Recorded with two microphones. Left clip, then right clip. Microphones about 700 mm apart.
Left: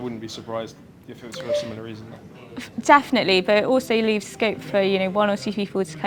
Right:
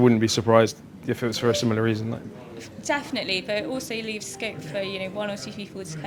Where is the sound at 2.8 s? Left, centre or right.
Left.